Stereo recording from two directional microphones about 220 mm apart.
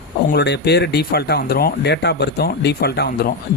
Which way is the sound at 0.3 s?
50° left (ahead or behind).